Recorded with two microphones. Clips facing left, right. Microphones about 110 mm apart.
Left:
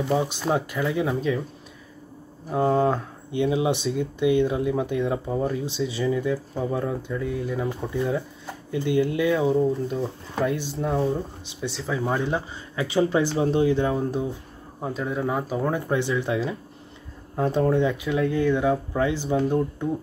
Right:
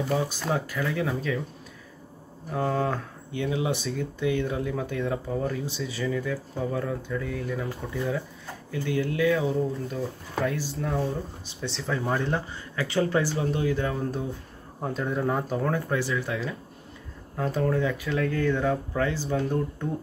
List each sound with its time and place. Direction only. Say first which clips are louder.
0.1 s speech: left 5 dB; 25° left (ahead or behind)
2.5 s speech: left 6 dB; 25° left (ahead or behind)
11.7 s speech: left 2 dB; 5° left (ahead or behind)
12.4 s speech: left 2 dB; 15° left (ahead or behind)
14.8 s speech: left 1 dB; centre (ahead or behind)
15.7 s speech: left 3 dB; 20° left (ahead or behind)